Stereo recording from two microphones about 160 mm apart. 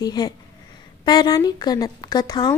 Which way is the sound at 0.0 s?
25° left (ahead or behind).